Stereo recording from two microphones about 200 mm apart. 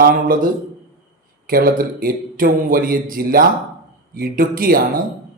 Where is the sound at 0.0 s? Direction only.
45° right (ahead or behind).